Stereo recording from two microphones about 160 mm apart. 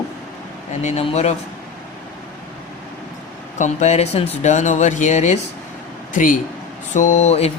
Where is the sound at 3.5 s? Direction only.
45° left (ahead or behind).